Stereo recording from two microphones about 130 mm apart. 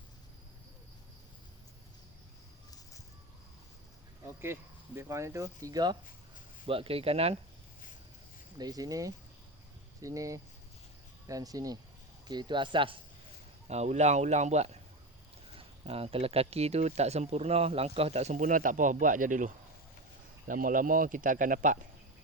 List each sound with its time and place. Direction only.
4.3 s speech: 20° right (ahead or behind)
6.7 s speech: 45° right (ahead or behind)
8.5 s speech: 30° right (ahead or behind)
13.7 s speech: 55° right (ahead or behind); by 19.5 s 85° right
20.5 s speech: 90° right